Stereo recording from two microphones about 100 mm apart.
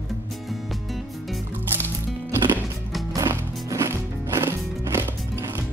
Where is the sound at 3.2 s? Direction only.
30° right (ahead or behind).